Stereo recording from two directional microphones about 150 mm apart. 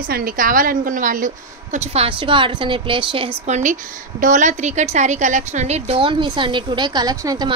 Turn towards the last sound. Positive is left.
turn(degrees=-25)  # may be behind; listen again after turning